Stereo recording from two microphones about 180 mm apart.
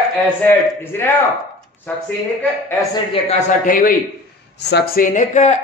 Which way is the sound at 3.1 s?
40° left (ahead or behind).